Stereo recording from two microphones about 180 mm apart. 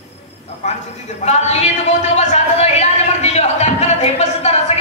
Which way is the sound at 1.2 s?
40° left (ahead or behind).